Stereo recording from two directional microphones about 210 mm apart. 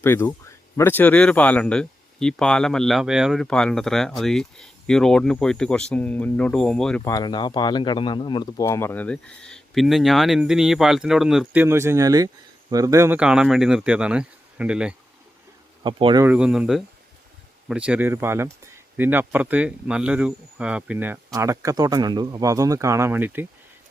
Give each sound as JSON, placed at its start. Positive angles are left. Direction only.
{"t": 0.0, "sound": "speech", "side_deg": 10}
{"t": 7.0, "sound": "speech", "side_deg": 15}
{"t": 15.8, "sound": "speech", "side_deg": -25}
{"t": 16.2, "sound": "speech", "side_deg": -5}